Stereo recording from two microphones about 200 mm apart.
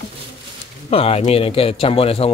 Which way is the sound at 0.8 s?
30° left (ahead or behind).